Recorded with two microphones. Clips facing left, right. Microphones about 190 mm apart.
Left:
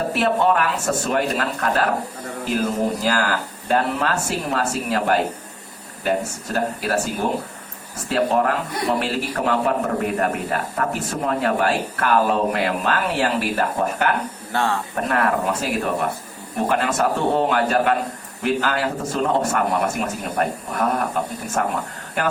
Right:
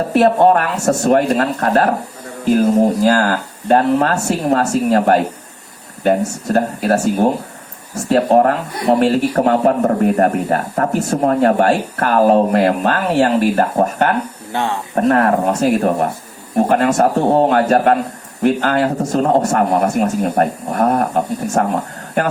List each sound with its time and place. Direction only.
0.1 s a man's voice: 40° right (ahead or behind)
14.5 s speech: 20° right (ahead or behind)
14.9 s a man's voice: 40° right (ahead or behind)